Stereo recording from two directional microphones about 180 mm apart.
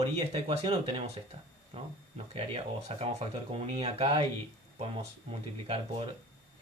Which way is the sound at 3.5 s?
35° right (ahead or behind).